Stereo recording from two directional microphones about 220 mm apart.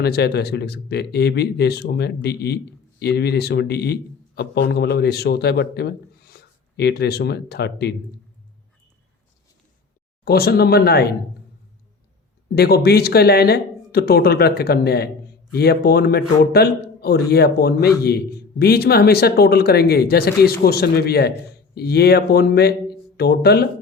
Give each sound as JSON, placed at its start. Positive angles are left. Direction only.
{"t": 0.0, "sound": "a man's voice", "side_deg": 45}
{"t": 10.2, "sound": "speech", "side_deg": 45}
{"t": 12.5, "sound": "speech", "side_deg": 45}